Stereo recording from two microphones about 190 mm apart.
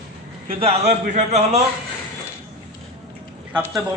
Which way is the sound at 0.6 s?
30° right (ahead or behind).